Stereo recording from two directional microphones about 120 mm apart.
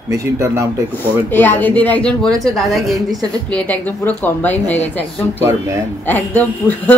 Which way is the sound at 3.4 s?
10° left (ahead or behind).